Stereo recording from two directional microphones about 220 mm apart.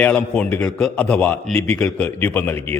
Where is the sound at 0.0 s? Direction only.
5° left (ahead or behind).